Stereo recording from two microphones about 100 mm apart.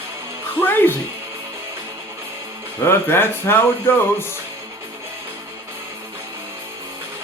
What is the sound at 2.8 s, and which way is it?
Speech, 25° left (ahead or behind).